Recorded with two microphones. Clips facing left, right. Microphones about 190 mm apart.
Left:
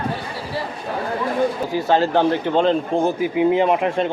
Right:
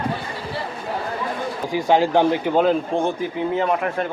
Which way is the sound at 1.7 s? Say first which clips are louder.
Even; 15° right (ahead or behind).